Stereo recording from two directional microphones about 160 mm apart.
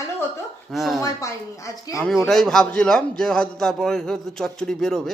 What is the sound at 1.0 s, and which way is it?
Speech, 20° left (ahead or behind).